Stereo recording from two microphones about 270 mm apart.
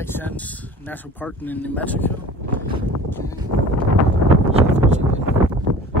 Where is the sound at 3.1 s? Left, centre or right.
Centre.